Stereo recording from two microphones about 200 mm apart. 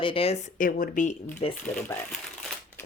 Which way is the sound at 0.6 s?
40° left (ahead or behind).